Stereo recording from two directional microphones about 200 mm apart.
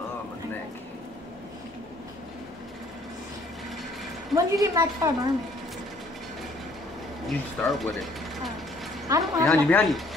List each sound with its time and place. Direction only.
4.4 s a woman's voice: 20° right (ahead or behind)
7.2 s speech: centre (ahead or behind)
9.1 s a woman's voice: 15° right (ahead or behind)
9.5 s speech: 5° left (ahead or behind)